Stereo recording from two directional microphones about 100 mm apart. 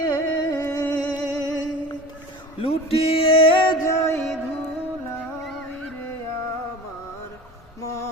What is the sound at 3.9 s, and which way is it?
Music, 25° left (ahead or behind).